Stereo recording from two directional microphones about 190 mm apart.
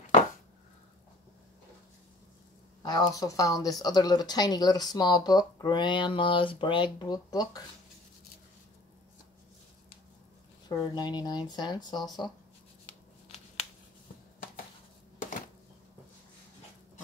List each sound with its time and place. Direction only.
2.8 s a woman's voice: 20° left (ahead or behind)
10.7 s speech: 20° left (ahead or behind)